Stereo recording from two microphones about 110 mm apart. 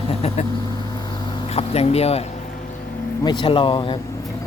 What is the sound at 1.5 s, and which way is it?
Speech, 65° left (ahead or behind).